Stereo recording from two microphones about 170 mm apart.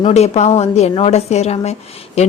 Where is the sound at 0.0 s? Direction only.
40° left (ahead or behind).